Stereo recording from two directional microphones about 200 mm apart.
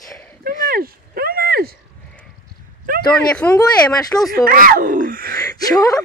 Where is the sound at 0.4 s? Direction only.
50° right (ahead or behind).